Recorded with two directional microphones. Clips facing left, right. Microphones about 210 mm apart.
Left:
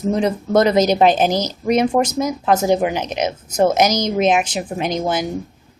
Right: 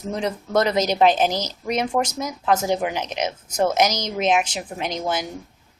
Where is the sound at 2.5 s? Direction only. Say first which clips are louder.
Left 4 dB; 45° left (ahead or behind).